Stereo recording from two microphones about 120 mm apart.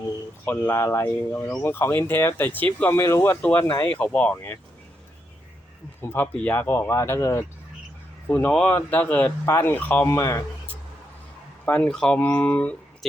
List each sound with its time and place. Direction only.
0.4 s speech: 15° left (ahead or behind)
6.0 s speech: 20° left (ahead or behind)
8.3 s speech: 10° left (ahead or behind)
11.6 s speech: 10° left (ahead or behind)